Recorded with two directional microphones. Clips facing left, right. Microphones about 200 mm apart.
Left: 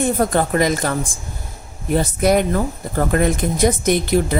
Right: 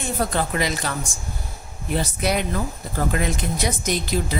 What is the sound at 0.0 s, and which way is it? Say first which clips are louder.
Speech: left 7 dB; 50° left (ahead or behind).